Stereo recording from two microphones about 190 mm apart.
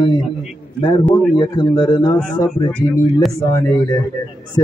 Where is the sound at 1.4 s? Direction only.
20° left (ahead or behind).